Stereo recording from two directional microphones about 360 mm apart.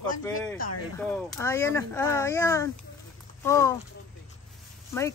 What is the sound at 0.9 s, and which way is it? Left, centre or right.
A woman's voice, centre.